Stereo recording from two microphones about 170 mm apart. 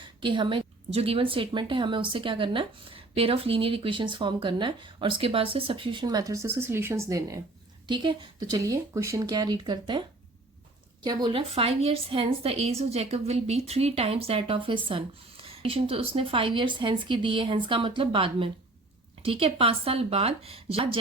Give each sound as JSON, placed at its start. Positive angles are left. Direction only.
{"t": 0.2, "sound": "a woman's voice", "side_deg": -30}
{"t": 11.0, "sound": "a woman's voice", "side_deg": -25}